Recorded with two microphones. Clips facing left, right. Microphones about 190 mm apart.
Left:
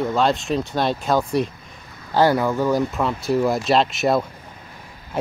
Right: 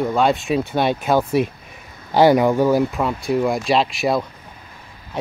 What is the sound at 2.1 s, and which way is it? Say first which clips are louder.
Speech: right 4 dB; 15° right (ahead or behind).